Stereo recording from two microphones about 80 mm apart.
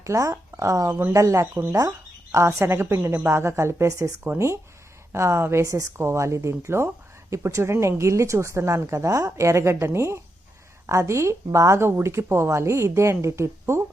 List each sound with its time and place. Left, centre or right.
0.0 s speech: right
2.6 s speech: right